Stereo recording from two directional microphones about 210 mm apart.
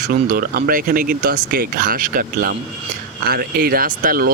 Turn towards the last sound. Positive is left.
turn(degrees=-45)  # may be behind; listen again after turning